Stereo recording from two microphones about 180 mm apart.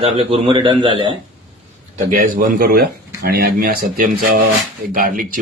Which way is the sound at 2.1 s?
50° right (ahead or behind).